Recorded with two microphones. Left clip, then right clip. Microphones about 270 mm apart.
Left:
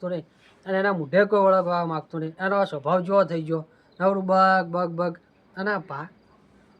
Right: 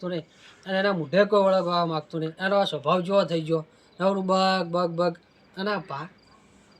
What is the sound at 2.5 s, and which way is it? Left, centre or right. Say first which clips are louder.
Speech: even; centre.